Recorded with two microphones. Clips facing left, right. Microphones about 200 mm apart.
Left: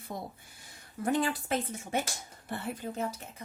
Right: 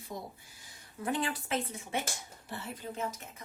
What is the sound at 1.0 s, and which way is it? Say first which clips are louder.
Speech: left 4 dB; 45° left (ahead or behind).